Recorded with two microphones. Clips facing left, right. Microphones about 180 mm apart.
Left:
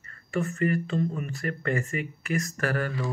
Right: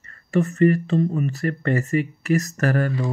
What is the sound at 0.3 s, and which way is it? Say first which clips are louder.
Speech: right 8 dB; 40° right (ahead or behind).